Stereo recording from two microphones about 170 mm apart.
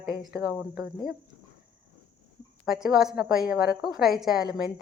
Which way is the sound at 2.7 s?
5° right (ahead or behind).